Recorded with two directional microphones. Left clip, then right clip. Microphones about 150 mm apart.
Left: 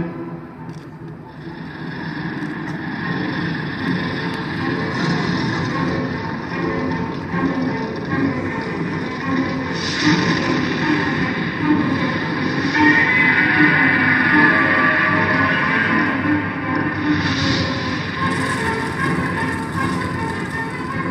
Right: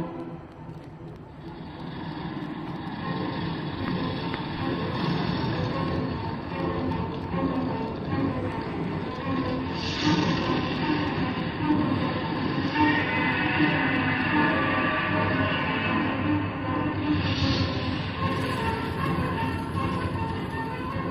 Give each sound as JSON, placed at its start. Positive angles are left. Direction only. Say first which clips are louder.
{"t": 9.9, "sound": "music", "louder": "left 8 dB", "side_deg": 30}
{"t": 12.7, "sound": "music", "louder": "left 11 dB", "side_deg": 30}
{"t": 17.1, "sound": "a sound", "louder": "left 9 dB", "side_deg": 35}